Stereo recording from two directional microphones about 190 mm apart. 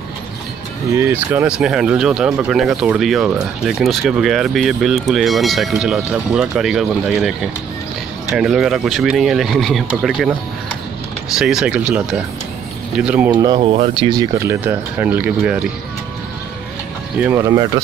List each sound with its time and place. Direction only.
0.9 s speech: 10° right (ahead or behind)
11.3 s speech: centre (ahead or behind)
13.3 s speech: 20° right (ahead or behind)
13.6 s speech: 30° right (ahead or behind); by 15.6 s 5° right (ahead or behind)
17.2 s speech: 15° right (ahead or behind)